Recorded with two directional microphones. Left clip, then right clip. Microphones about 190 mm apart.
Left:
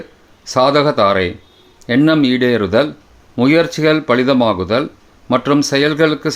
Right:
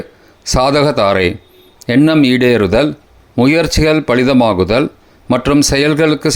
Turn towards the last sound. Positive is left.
turn(degrees=-25)  # may be behind; listen again after turning